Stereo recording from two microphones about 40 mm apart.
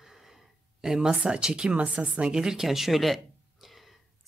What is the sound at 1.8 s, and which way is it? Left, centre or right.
Speech, right.